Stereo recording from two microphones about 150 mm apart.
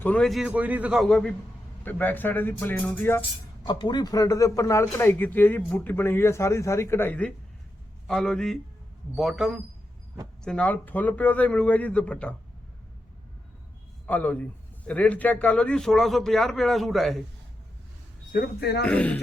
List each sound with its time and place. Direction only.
0.0 s a man's voice: 5° left (ahead or behind)
1.0 s a man's voice: 5° left (ahead or behind)
3.7 s a man's voice: 30° left (ahead or behind); by 12.3 s 10° left (ahead or behind)
14.1 s a man's voice: 10° left (ahead or behind)
18.3 s speech: 80° left
18.9 s speech: 10° left (ahead or behind)